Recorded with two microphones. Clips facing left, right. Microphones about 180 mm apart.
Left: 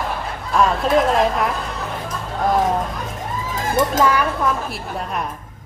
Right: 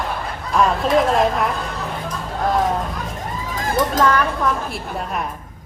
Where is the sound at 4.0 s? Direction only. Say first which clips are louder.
Even; 10° left (ahead or behind).